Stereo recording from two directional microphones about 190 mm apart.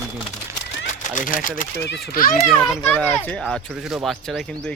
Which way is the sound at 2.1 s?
50° left (ahead or behind).